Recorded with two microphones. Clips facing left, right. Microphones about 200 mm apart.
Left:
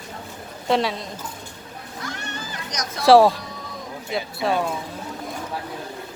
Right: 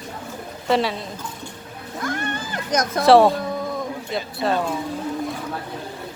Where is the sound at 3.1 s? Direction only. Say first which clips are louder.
Even; centre (ahead or behind).